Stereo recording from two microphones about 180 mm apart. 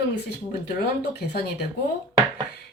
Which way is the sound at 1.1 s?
65° left (ahead or behind).